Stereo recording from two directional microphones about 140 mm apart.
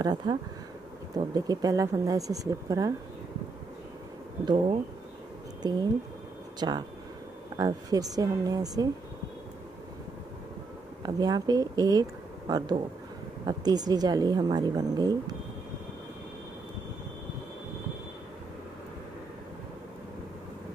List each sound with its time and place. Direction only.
0.0 s a woman's voice: 30° right (ahead or behind)
5.6 s a woman's voice: 30° right (ahead or behind)
11.0 s a woman's voice: 30° right (ahead or behind)